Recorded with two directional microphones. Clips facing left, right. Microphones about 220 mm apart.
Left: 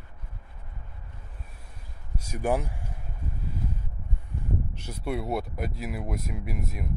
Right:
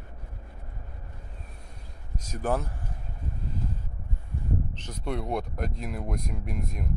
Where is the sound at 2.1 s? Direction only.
10° left (ahead or behind).